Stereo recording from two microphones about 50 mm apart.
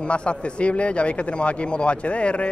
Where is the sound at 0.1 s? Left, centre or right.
Left.